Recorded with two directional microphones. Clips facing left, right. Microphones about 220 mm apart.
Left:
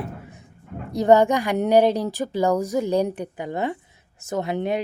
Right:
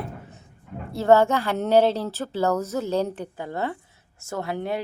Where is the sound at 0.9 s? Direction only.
15° left (ahead or behind).